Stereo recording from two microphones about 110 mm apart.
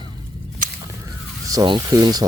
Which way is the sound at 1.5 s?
45° right (ahead or behind).